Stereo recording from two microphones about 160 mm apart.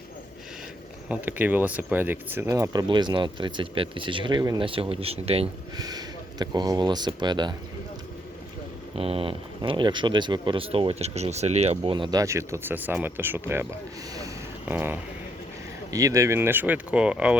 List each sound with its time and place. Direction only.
1.0 s speech: 10° right (ahead or behind); by 5.5 s 40° right (ahead or behind)
5.7 s speech: 25° right (ahead or behind)
9.0 s speech: 35° right (ahead or behind); by 13.7 s 15° right (ahead or behind)
14.7 s speech: 10° right (ahead or behind)